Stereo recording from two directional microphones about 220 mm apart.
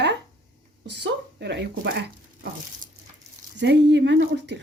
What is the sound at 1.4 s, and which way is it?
Speech, 50° right (ahead or behind).